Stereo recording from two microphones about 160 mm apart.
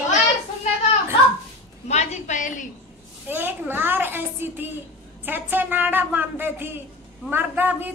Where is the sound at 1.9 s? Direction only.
45° left (ahead or behind).